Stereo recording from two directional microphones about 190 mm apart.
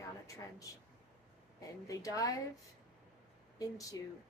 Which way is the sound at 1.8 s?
15° left (ahead or behind).